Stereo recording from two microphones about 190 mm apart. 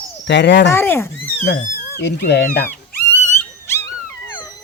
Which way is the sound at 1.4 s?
55° left (ahead or behind).